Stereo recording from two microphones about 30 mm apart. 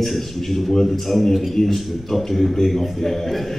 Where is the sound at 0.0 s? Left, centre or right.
Centre.